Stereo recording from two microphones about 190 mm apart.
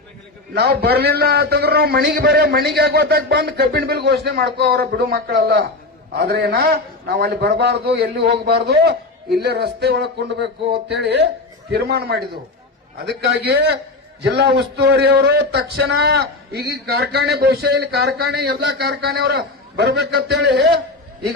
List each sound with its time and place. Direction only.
0.5 s a man's voice: 60° right (ahead or behind)